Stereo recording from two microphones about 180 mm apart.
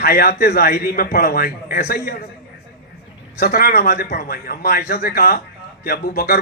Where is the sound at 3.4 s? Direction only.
60° left (ahead or behind).